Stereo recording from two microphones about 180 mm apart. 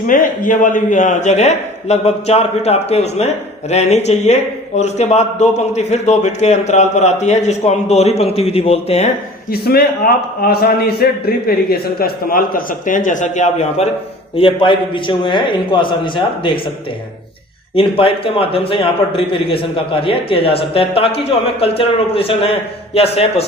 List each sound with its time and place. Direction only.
0.1 s a man's voice: 45° left (ahead or behind)
9.5 s a man's voice: 60° left (ahead or behind); by 13.8 s 40° left (ahead or behind)
14.3 s a man's voice: 30° left (ahead or behind)
17.7 s a man's voice: 30° left (ahead or behind)